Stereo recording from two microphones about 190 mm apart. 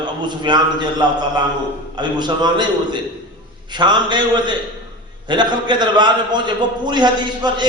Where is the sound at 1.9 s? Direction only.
25° right (ahead or behind).